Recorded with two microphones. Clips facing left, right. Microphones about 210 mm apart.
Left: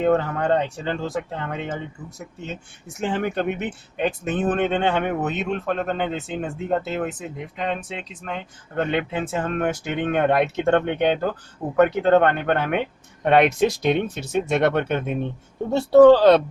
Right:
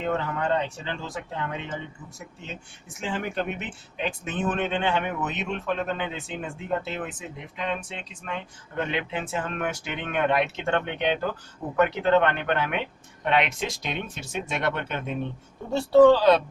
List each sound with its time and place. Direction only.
0.0 s speech: 50° left (ahead or behind)
3.0 s speech: 55° left (ahead or behind)
6.4 s speech: 40° left (ahead or behind)
8.7 s speech: 55° left (ahead or behind)